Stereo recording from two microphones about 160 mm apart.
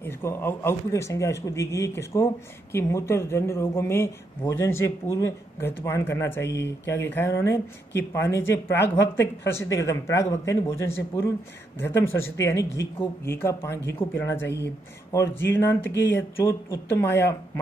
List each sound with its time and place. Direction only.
0.0 s speech: 15° left (ahead or behind)